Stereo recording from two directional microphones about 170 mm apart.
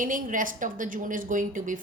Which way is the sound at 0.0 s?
50° right (ahead or behind).